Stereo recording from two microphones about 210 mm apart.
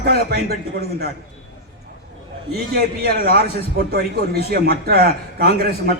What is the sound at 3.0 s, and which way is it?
A man's voice, 45° right (ahead or behind).